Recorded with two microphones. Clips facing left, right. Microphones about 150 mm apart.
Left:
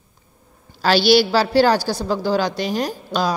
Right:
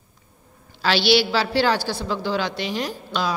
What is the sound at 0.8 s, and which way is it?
A woman's voice, 40° left (ahead or behind).